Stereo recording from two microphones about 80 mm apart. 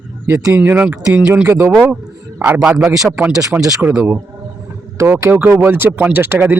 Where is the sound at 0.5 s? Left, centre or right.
Right.